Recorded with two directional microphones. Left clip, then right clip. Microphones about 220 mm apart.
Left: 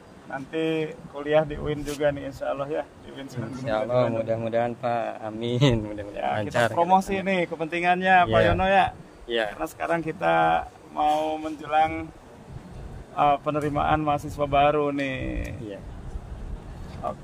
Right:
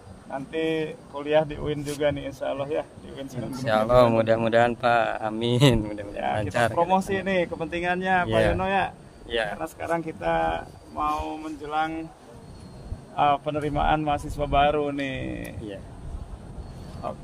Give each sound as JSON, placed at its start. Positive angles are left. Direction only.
{"t": 0.3, "sound": "a man's voice", "side_deg": 0}
{"t": 3.6, "sound": "a man's voice", "side_deg": -15}
{"t": 8.3, "sound": "a man's voice", "side_deg": 0}
{"t": 8.5, "sound": "speech", "side_deg": 40}
{"t": 9.3, "sound": "a man's voice", "side_deg": 0}
{"t": 9.6, "sound": "speech", "side_deg": 45}
{"t": 11.2, "sound": "speech", "side_deg": 25}
{"t": 13.1, "sound": "a man's voice", "side_deg": 5}
{"t": 17.0, "sound": "a man's voice", "side_deg": 0}